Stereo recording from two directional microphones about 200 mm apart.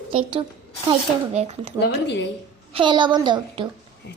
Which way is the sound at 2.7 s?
25° right (ahead or behind).